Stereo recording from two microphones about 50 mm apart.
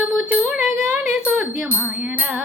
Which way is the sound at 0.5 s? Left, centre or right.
Centre.